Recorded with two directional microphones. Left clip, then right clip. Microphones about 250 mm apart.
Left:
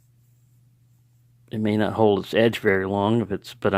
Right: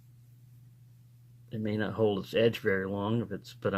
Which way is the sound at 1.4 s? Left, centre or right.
Left.